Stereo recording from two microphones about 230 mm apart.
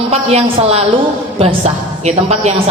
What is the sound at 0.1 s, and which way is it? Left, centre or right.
A woman's voice, right.